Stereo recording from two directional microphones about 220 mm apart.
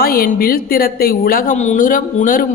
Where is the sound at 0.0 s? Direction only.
40° left (ahead or behind).